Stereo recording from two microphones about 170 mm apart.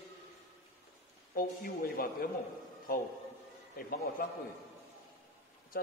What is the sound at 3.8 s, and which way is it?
Speech, 60° left (ahead or behind).